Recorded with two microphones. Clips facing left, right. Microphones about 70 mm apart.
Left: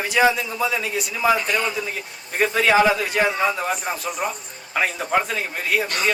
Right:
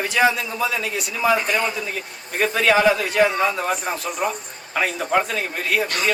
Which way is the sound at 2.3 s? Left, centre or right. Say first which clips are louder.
Left 1 dB; centre.